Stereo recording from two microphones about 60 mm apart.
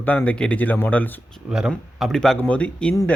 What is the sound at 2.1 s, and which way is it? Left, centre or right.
Speech, centre.